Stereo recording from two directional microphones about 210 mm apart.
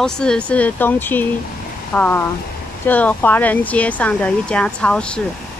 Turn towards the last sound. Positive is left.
turn(degrees=5)  # may be behind; listen again after turning